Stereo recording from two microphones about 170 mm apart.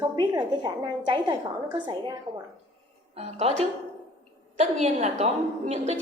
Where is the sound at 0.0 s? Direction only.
25° right (ahead or behind).